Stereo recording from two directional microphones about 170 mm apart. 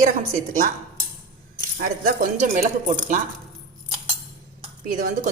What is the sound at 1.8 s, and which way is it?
Speech, 55° right (ahead or behind).